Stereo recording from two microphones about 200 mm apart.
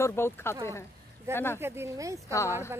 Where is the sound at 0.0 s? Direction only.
10° left (ahead or behind).